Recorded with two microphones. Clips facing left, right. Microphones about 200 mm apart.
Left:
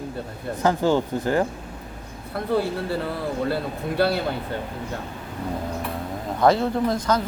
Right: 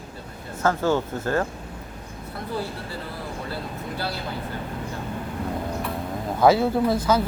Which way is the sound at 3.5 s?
65° left (ahead or behind).